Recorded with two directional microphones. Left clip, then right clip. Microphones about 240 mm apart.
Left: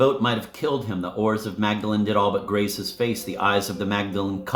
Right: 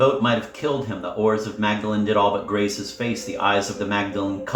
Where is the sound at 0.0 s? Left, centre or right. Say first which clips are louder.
Right 2 dB; left.